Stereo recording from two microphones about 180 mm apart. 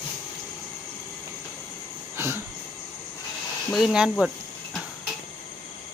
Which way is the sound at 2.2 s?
10° right (ahead or behind).